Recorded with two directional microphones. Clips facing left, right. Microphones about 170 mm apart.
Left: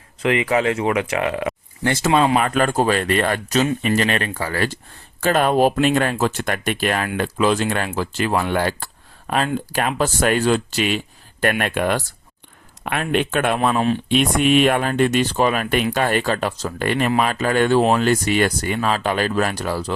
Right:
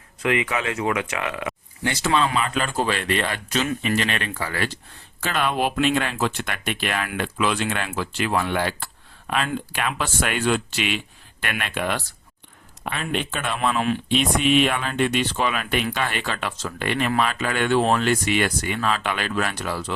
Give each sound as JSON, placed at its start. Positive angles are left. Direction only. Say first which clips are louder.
{"t": 0.2, "sound": "speech", "louder": "left 5 dB", "side_deg": 30}
{"t": 1.8, "sound": "speech", "louder": "left 5 dB", "side_deg": 50}
{"t": 12.8, "sound": "speech", "louder": "left 6 dB", "side_deg": 60}
{"t": 13.6, "sound": "speech", "louder": "left 4 dB", "side_deg": 35}
{"t": 14.1, "sound": "speech", "louder": "left 3 dB", "side_deg": 50}